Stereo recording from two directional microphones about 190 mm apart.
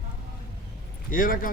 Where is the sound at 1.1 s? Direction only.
45° left (ahead or behind).